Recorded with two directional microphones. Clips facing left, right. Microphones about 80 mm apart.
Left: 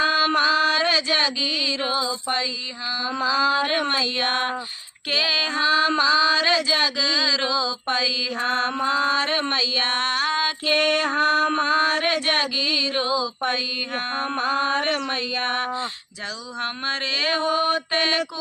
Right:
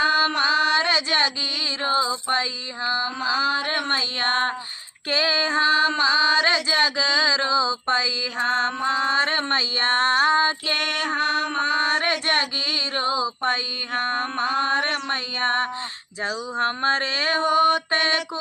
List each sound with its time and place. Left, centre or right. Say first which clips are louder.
0.0 s mantra: left 1 dB; right
11.2 s mantra: left 4 dB; left
11.9 s mantra: even; right